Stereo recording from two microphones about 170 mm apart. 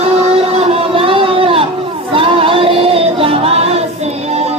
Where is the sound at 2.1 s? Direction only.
30° right (ahead or behind).